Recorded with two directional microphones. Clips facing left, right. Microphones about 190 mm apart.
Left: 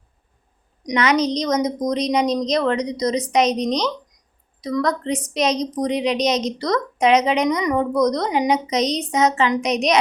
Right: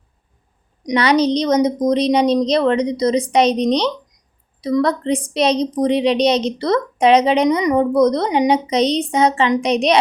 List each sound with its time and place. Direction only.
0.9 s a woman's voice: 30° right (ahead or behind)